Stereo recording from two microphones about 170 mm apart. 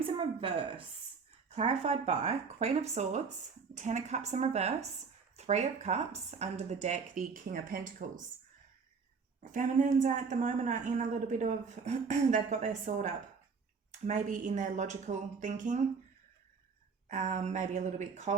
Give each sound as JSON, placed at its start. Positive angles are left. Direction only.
{"t": 0.2, "sound": "a woman's voice", "side_deg": -30}
{"t": 9.4, "sound": "a woman's voice", "side_deg": -50}
{"t": 17.1, "sound": "a woman's voice", "side_deg": -45}